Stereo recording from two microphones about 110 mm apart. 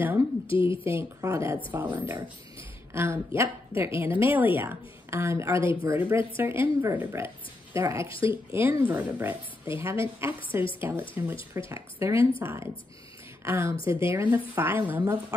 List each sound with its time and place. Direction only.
0.5 s speech: 50° left (ahead or behind)
0.8 s a woman's voice: 25° right (ahead or behind)
8.1 s speech: 55° left (ahead or behind)
8.5 s a woman's voice: 20° right (ahead or behind)